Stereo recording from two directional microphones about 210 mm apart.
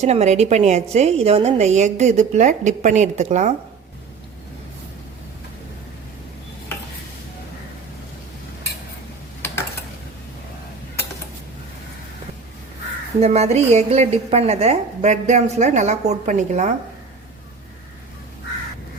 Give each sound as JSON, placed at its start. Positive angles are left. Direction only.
{"t": 0.0, "sound": "a woman's voice", "side_deg": -30}
{"t": 13.1, "sound": "a woman's voice", "side_deg": -30}